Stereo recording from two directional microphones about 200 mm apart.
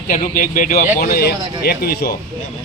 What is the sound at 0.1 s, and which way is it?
A man's voice, 45° left (ahead or behind).